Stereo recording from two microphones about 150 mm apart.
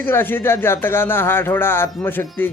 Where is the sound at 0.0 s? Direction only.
15° left (ahead or behind).